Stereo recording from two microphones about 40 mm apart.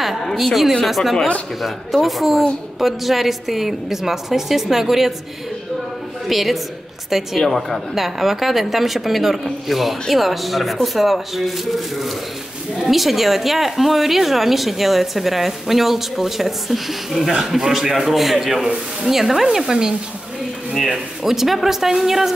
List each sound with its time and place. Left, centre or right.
0.0 s a sound: centre
0.3 s a woman's voice: centre
6.2 s a woman's voice: centre
19.4 s speech: centre